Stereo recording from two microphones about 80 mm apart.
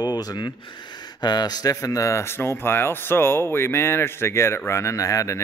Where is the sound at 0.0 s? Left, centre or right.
Left.